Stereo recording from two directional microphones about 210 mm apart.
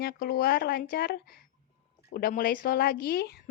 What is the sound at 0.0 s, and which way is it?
A woman's voice, 45° left (ahead or behind).